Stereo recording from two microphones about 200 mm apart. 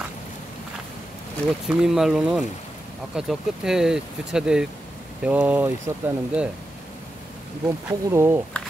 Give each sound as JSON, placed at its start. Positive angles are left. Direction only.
{"t": 1.7, "sound": "speech", "side_deg": 0}
{"t": 7.6, "sound": "speech", "side_deg": -15}